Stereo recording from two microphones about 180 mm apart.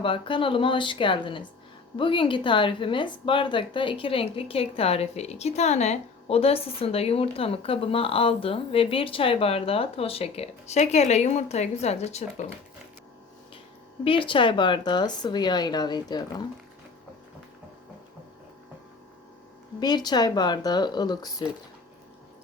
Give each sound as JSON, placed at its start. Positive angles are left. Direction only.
{"t": 0.0, "sound": "a woman's voice", "side_deg": 30}
{"t": 14.0, "sound": "speech", "side_deg": 30}
{"t": 19.8, "sound": "speech", "side_deg": 25}